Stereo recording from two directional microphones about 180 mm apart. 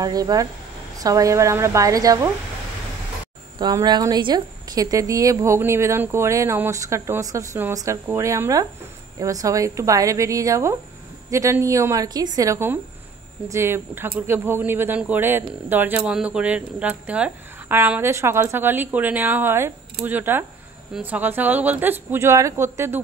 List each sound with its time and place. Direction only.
0.0 s speech: 20° right (ahead or behind)
3.5 s speech: 25° right (ahead or behind)